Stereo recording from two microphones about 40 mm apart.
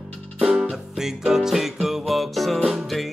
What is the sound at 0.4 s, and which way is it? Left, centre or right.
Music, centre.